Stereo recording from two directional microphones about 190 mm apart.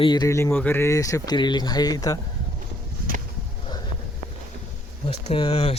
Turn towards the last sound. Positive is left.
turn(degrees=30)  # may be behind; listen again after turning